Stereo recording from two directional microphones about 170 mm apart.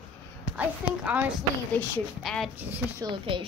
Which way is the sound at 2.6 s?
10° right (ahead or behind).